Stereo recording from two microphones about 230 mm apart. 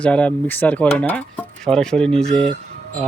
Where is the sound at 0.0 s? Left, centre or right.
Centre.